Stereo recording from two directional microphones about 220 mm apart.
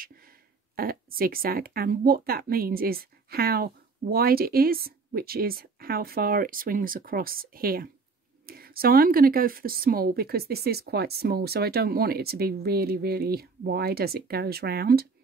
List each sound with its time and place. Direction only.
0.7 s speech: 40° right (ahead or behind)